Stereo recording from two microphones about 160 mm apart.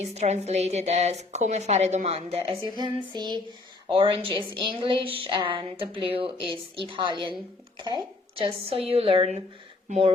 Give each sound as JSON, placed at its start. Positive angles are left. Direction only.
{"t": 0.0, "sound": "a woman's voice", "side_deg": -45}